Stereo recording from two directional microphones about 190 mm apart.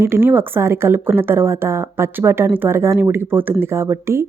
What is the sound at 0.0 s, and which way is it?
A woman's voice, 10° right (ahead or behind).